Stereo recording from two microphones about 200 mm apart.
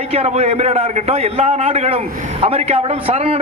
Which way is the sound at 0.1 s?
30° right (ahead or behind).